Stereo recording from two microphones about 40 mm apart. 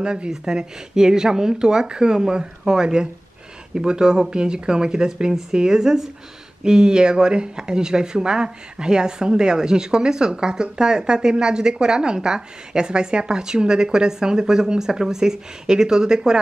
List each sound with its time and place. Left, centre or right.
0.0 s speech: right